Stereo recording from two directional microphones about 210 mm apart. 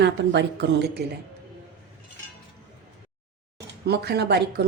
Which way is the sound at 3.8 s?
50° right (ahead or behind).